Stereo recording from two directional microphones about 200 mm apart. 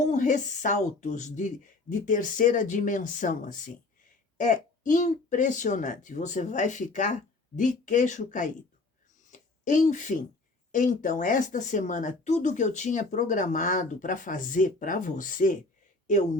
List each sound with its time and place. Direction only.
0.0 s speech: 35° left (ahead or behind)
9.3 s a sound: 40° left (ahead or behind)
10.7 s speech: 40° left (ahead or behind)